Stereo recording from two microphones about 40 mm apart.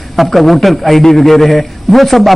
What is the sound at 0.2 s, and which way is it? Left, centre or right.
A man's voice, centre.